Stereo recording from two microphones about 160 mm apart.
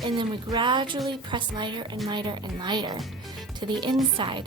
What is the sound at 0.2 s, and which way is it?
A woman's voice, 30° right (ahead or behind).